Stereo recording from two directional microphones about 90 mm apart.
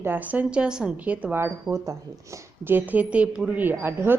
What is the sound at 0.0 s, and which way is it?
A woman's voice, 20° right (ahead or behind).